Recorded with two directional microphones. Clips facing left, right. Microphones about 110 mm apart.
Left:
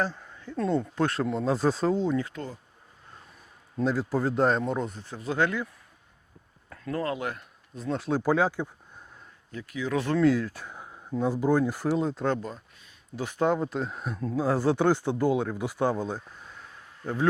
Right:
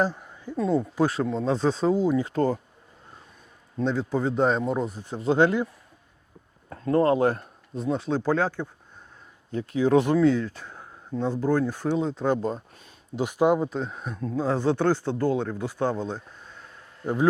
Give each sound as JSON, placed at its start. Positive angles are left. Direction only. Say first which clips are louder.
{"t": 0.0, "sound": "a sound", "louder": "right 4 dB", "side_deg": -15}
{"t": 0.5, "sound": "speech", "louder": "right 3 dB", "side_deg": -5}
{"t": 2.3, "sound": "speech", "louder": "right 14 dB", "side_deg": -45}
{"t": 3.8, "sound": "speech", "louder": "right 1 dB", "side_deg": 5}
{"t": 5.0, "sound": "speech", "louder": "right 8 dB", "side_deg": -25}
{"t": 6.7, "sound": "speech", "louder": "right 9 dB", "side_deg": -30}
{"t": 7.9, "sound": "speech", "louder": "right 1 dB", "side_deg": 0}
{"t": 9.5, "sound": "speech", "louder": "right 9 dB", "side_deg": -30}
{"t": 10.2, "sound": "speech", "louder": "right 2 dB", "side_deg": 0}
{"t": 12.4, "sound": "speech", "louder": "right 9 dB", "side_deg": -35}
{"t": 13.1, "sound": "speech", "louder": "right 4 dB", "side_deg": -15}
{"t": 13.6, "sound": "speech", "louder": "right 2 dB", "side_deg": 0}